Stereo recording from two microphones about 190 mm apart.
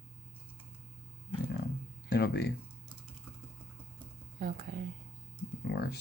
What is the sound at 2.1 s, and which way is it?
Speech, 60° left (ahead or behind).